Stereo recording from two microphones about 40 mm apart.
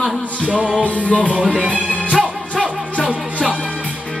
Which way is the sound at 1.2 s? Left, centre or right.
Right.